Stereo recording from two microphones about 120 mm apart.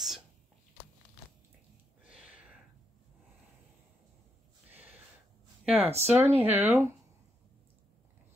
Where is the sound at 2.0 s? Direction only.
10° right (ahead or behind).